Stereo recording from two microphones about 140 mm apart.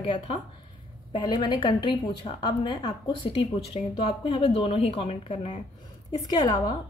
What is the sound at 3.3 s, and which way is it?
A woman's voice, 40° left (ahead or behind).